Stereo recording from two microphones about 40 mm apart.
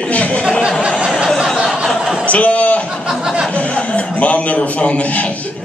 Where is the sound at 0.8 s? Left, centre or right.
Right.